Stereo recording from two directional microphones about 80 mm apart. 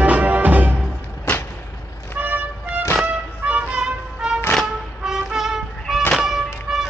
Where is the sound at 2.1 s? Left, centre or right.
Right.